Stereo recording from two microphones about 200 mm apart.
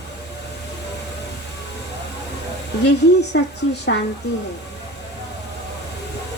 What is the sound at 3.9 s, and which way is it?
Speech, 55° left (ahead or behind).